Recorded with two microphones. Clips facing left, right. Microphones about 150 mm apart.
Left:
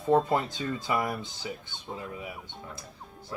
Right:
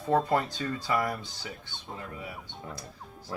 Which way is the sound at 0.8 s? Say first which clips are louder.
Right 1 dB; 20° left (ahead or behind).